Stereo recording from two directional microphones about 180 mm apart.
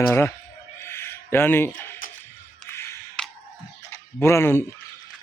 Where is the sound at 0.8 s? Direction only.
15° left (ahead or behind).